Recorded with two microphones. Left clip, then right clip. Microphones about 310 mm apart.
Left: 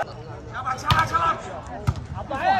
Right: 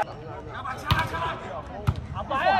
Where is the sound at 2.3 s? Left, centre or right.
Right.